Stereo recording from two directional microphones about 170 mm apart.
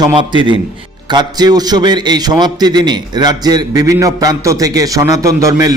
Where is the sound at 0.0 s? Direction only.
25° right (ahead or behind).